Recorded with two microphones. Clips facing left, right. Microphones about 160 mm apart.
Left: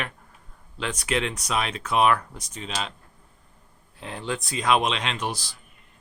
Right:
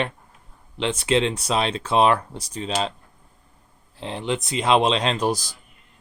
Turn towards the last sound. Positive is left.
turn(degrees=-40)  # may be behind; listen again after turning